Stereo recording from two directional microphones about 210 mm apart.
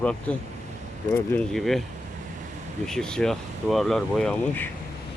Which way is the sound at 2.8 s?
5° left (ahead or behind).